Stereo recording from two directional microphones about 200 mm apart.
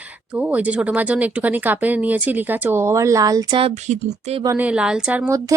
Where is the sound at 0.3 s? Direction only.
5° right (ahead or behind); by 3.9 s 25° right (ahead or behind).